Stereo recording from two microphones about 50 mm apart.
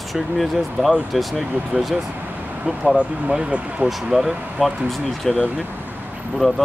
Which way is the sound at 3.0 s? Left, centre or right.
Right.